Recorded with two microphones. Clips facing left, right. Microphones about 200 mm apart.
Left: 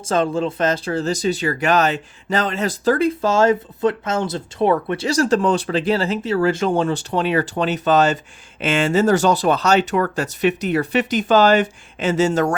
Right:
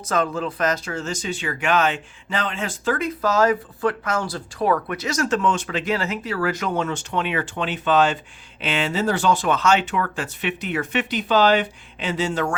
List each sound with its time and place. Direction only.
0.0 s speech: 30° left (ahead or behind)